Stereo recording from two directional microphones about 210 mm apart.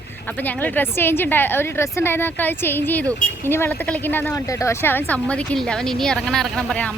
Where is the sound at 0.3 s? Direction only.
10° left (ahead or behind).